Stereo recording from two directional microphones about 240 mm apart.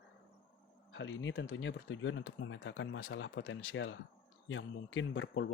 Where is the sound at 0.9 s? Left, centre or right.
Left.